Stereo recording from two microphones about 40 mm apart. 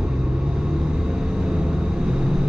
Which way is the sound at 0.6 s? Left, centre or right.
Centre.